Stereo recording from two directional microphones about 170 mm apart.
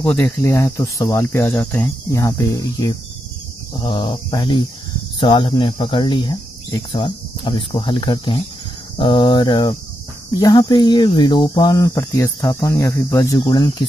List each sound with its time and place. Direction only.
0.0 s speech: 15° left (ahead or behind)